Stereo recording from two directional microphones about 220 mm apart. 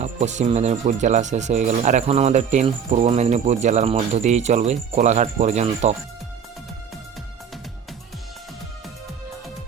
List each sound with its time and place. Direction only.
0.0 s speech: 30° right (ahead or behind)